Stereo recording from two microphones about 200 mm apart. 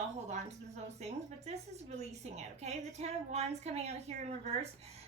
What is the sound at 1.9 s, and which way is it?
A woman's voice, 35° right (ahead or behind).